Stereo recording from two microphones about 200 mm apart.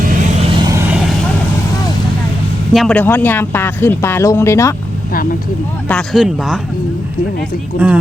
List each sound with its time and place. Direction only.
0.5 s vehicle: 20° right (ahead or behind)
2.7 s speech: 5° left (ahead or behind)
5.9 s speech: centre (ahead or behind)
7.8 s speech: 5° right (ahead or behind)